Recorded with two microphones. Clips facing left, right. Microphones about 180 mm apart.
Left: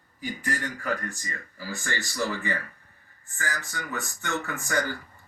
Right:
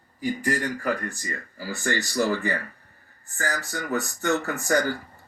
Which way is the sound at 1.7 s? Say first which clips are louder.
Right 7 dB; 40° right (ahead or behind).